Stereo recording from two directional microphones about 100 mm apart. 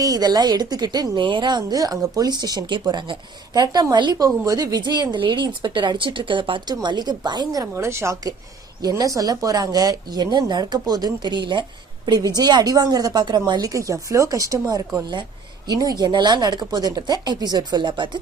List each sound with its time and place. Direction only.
0.0 s speech: 40° right (ahead or behind)
1.2 s speech: 55° right (ahead or behind)
7.6 s speech: 30° right (ahead or behind); by 13.4 s 45° right (ahead or behind)
13.6 s speech: 35° right (ahead or behind)
15.1 s speech: 45° right (ahead or behind)